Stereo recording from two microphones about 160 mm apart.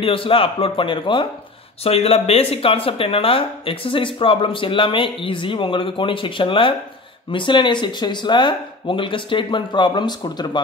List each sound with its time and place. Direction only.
0.0 s speech: 35° left (ahead or behind)